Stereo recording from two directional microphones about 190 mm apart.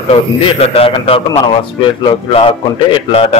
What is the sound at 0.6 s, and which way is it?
A man's voice, 30° left (ahead or behind).